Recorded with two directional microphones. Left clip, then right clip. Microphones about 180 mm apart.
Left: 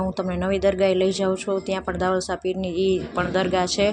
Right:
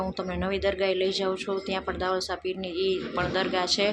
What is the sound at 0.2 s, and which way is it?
Speech, 30° left (ahead or behind).